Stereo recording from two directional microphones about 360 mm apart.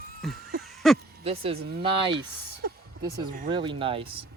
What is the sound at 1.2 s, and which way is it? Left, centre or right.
Speech, centre.